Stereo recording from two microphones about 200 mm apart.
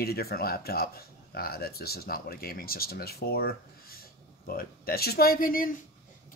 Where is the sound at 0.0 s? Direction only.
50° left (ahead or behind).